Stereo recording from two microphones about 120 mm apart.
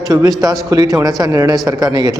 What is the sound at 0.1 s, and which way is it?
A man's voice, 30° right (ahead or behind).